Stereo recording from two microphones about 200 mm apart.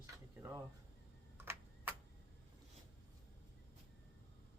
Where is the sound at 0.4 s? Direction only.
10° right (ahead or behind).